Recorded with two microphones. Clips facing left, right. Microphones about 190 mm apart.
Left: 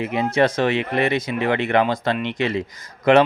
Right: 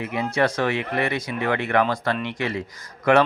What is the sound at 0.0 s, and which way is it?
Speech, 25° left (ahead or behind).